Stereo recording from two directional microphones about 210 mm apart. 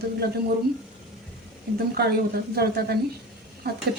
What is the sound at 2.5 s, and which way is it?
Speech, 50° right (ahead or behind).